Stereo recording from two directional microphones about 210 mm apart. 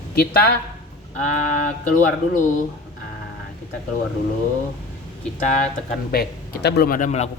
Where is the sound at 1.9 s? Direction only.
40° left (ahead or behind).